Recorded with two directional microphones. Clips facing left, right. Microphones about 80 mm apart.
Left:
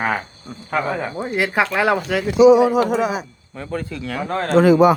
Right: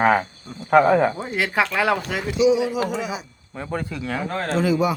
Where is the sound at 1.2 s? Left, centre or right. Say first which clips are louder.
Left 3 dB; centre.